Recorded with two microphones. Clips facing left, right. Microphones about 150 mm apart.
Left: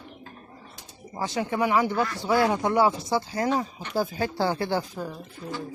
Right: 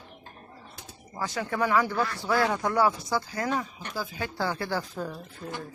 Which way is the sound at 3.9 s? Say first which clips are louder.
Left 7 dB; 40° left (ahead or behind).